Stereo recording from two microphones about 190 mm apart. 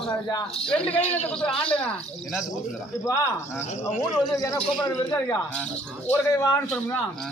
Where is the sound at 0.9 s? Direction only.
10° left (ahead or behind).